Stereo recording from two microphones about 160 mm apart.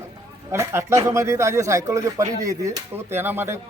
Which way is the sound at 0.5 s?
15° right (ahead or behind).